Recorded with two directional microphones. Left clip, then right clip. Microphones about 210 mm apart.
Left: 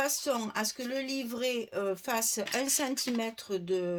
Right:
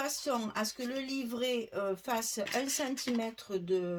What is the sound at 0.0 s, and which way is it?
Speech, 40° left (ahead or behind).